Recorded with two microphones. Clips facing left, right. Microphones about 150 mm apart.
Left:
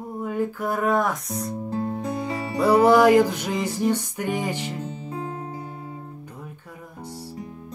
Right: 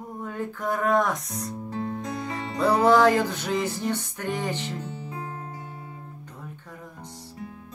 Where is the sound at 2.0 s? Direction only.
10° left (ahead or behind).